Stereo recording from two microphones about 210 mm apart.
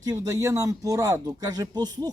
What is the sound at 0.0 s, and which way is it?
Speech, 15° right (ahead or behind).